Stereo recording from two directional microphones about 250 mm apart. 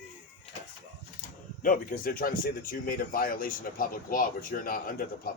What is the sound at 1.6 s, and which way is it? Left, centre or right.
Speech, left.